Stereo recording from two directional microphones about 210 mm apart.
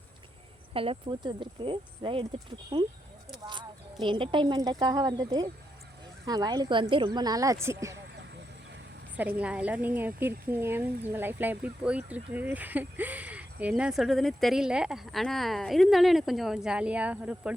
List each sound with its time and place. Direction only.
0.7 s a woman's voice: 25° right (ahead or behind)
9.1 s a woman's voice: 5° right (ahead or behind)